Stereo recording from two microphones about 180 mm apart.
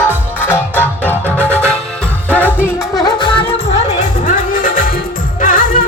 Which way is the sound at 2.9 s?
25° left (ahead or behind).